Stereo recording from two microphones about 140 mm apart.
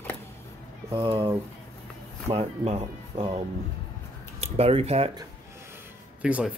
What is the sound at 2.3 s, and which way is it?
Speech, 50° right (ahead or behind).